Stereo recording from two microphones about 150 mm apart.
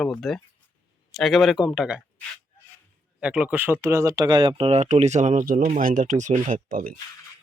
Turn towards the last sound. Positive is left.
turn(degrees=-70)  # may be behind; listen again after turning